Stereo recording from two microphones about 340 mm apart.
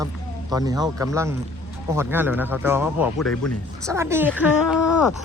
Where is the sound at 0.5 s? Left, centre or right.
Centre.